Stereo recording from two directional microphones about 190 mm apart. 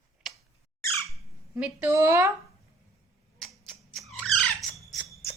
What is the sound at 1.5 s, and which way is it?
Speech, 5° right (ahead or behind).